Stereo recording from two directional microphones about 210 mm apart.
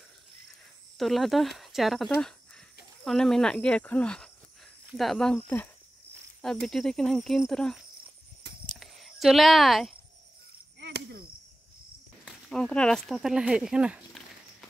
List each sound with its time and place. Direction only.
0.9 s speech: centre (ahead or behind)
6.4 s speech: centre (ahead or behind)
8.6 s a sound: centre (ahead or behind)
10.8 s chop: 50° right (ahead or behind)
12.3 s speech: centre (ahead or behind)